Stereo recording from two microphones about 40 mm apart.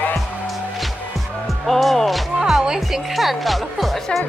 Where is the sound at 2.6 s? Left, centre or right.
Centre.